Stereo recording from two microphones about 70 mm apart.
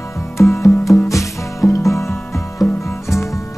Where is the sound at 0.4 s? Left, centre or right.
Left.